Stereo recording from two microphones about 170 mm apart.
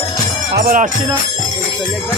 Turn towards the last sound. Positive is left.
turn(degrees=-60)  # may be behind; listen again after turning